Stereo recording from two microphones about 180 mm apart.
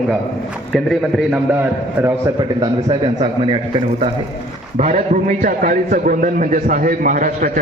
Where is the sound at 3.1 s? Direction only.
30° right (ahead or behind).